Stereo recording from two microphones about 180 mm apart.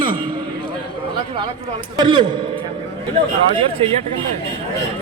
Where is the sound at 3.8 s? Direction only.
30° right (ahead or behind).